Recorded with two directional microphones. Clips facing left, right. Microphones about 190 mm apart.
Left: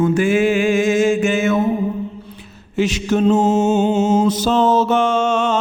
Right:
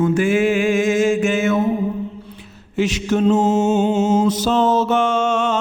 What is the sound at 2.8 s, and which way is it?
Mantra, 35° left (ahead or behind).